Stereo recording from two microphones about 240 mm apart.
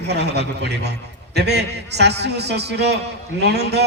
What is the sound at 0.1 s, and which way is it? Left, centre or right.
A man's voice, right.